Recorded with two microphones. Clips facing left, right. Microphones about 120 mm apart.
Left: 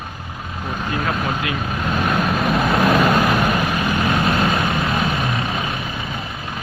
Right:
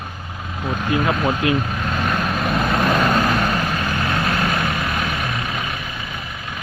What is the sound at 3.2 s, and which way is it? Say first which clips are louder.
Vehicle: left 2 dB; 15° left (ahead or behind).